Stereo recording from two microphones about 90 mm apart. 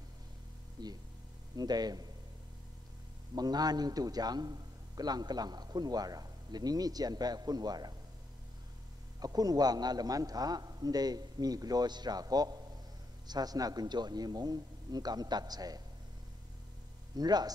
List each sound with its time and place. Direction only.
0.8 s a man's voice: 50° right (ahead or behind)
3.3 s a man's voice: 45° right (ahead or behind)
9.2 s a man's voice: 45° right (ahead or behind)
17.1 s a man's voice: 50° right (ahead or behind)